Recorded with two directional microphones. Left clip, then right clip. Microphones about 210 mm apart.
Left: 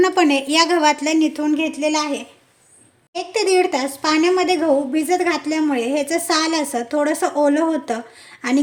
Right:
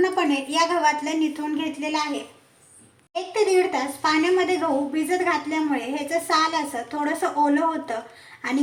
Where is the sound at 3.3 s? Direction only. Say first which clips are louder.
Left 3 dB; 55° left (ahead or behind).